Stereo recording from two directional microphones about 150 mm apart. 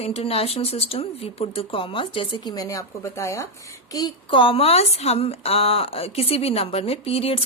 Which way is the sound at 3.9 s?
30° left (ahead or behind).